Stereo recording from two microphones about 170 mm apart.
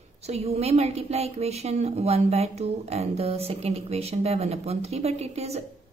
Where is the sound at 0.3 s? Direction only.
40° right (ahead or behind).